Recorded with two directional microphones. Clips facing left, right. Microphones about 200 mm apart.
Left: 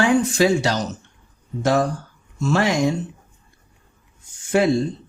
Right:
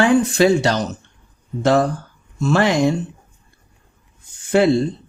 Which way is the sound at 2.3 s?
60° right (ahead or behind).